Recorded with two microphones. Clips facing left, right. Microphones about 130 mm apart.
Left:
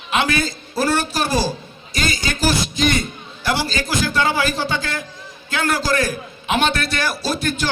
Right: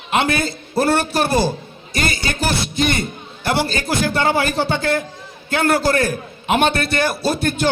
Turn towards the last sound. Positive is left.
turn(degrees=-55)  # may be behind; listen again after turning